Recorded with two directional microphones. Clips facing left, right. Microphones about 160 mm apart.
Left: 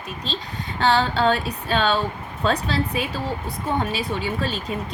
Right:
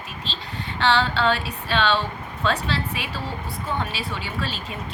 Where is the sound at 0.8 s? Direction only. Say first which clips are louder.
Left 2 dB; 40° left (ahead or behind).